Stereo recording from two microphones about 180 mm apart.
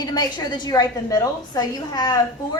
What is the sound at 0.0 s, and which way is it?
A woman's voice, 20° left (ahead or behind).